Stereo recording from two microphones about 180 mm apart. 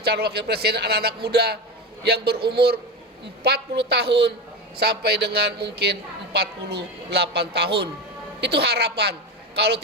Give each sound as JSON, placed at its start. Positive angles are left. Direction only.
{"t": 0.0, "sound": "a woman's voice", "side_deg": -60}